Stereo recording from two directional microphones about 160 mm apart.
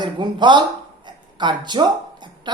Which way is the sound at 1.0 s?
30° right (ahead or behind).